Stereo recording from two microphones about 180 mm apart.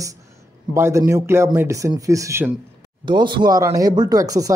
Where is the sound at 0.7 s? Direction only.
15° right (ahead or behind).